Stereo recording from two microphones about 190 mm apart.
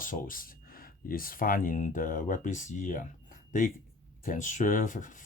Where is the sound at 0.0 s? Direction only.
45° left (ahead or behind).